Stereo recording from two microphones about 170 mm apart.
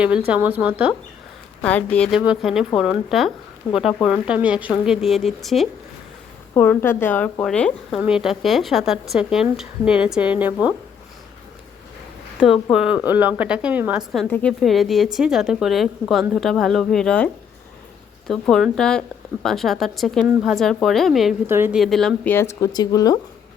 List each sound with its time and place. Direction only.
0.3 s a woman's voice: 10° right (ahead or behind)
1.6 s a woman's voice: 5° left (ahead or behind)
6.6 s a woman's voice: 10° left (ahead or behind); by 10.8 s 10° right (ahead or behind)
12.7 s a woman's voice: 5° right (ahead or behind)
14.3 s speech: 10° left (ahead or behind)
14.6 s a woman's voice: centre (ahead or behind)
18.3 s a woman's voice: 5° left (ahead or behind)
21.4 s a woman's voice: 15° right (ahead or behind)
21.8 s speech: centre (ahead or behind); by 23.1 s 20° left (ahead or behind)